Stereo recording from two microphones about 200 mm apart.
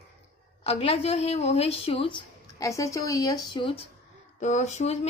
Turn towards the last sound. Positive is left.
turn(degrees=35)  # may be behind; listen again after turning